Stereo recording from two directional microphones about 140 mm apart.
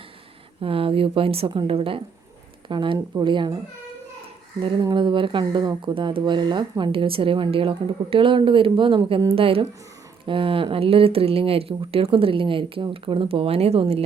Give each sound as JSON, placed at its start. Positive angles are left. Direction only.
{"t": 0.6, "sound": "speech", "side_deg": -40}
{"t": 4.6, "sound": "speech", "side_deg": -35}